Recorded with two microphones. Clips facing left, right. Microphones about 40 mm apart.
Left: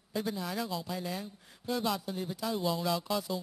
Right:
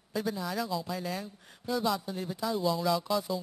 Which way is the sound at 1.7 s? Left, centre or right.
Centre.